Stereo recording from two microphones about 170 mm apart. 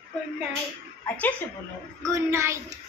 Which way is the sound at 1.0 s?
10° left (ahead or behind).